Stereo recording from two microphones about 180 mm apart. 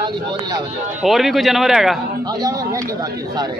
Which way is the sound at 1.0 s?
Centre (ahead or behind).